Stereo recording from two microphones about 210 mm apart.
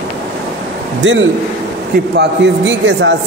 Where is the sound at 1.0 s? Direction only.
60° right (ahead or behind).